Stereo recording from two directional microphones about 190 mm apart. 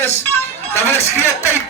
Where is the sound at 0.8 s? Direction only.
15° left (ahead or behind).